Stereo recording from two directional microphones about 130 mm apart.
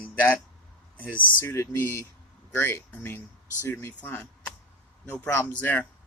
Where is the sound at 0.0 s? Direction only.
10° left (ahead or behind).